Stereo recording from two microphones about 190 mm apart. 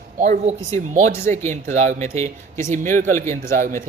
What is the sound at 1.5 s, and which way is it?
A man's voice, 35° right (ahead or behind).